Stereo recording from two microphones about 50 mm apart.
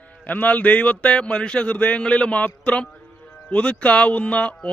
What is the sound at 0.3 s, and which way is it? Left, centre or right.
A man's voice, left.